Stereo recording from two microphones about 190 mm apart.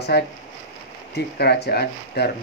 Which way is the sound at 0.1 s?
60° left (ahead or behind).